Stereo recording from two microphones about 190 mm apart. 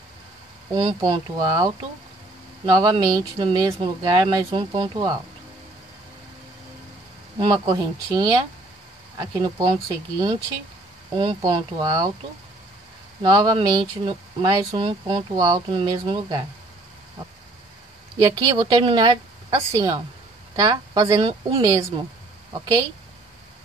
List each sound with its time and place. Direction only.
0.7 s speech: 25° right (ahead or behind)
7.3 s speech: 20° right (ahead or behind)
13.2 s speech: 20° right (ahead or behind)
18.1 s speech: 20° right (ahead or behind)